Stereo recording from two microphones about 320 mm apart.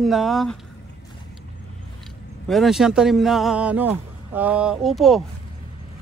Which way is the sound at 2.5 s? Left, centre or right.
Centre.